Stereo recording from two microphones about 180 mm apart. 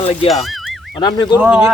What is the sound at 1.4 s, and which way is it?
Speech, 5° right (ahead or behind).